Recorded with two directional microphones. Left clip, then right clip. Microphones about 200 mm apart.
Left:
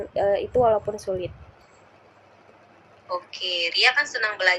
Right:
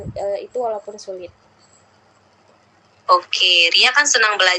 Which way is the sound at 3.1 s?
45° right (ahead or behind).